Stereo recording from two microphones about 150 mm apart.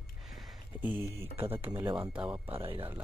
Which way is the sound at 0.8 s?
15° right (ahead or behind).